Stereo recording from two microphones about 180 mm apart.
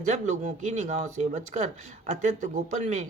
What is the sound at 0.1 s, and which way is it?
Speech, 40° right (ahead or behind).